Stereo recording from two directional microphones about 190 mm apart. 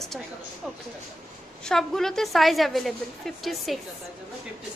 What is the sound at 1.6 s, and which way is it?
A woman's voice, centre (ahead or behind).